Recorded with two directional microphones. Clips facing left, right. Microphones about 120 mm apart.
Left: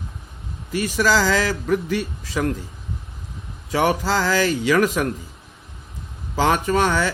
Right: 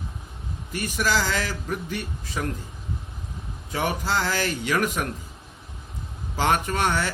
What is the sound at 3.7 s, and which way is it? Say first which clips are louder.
Speech: left 7 dB; 90° left.